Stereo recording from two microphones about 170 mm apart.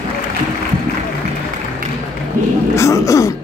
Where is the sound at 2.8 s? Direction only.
15° left (ahead or behind).